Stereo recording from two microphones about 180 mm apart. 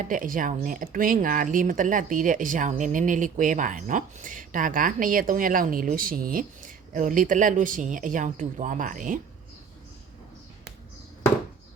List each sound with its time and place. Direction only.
0.0 s speech: 50° right (ahead or behind)